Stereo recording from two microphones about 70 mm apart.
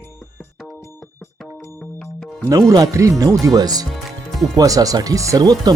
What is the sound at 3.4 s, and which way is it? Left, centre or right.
Speech, right.